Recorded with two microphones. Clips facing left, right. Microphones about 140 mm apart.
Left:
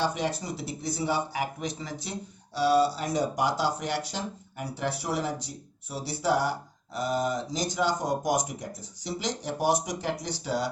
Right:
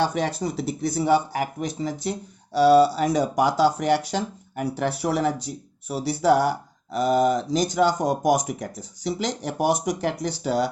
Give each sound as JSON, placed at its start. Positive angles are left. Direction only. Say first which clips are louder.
{"t": 0.1, "sound": "a man's voice", "louder": "right 5 dB", "side_deg": -65}
{"t": 2.5, "sound": "a man's voice", "louder": "right 7 dB", "side_deg": -75}